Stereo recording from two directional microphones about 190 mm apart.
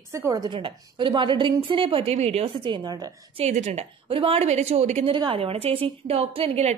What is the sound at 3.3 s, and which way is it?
A woman's voice, 35° right (ahead or behind).